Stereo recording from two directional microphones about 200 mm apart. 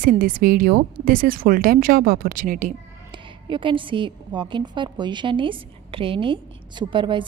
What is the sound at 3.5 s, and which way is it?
A woman's voice, 25° right (ahead or behind).